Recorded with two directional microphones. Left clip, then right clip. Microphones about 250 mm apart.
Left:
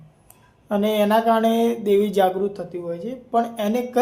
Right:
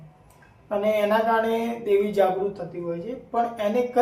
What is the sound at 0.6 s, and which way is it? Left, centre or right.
Speech, left.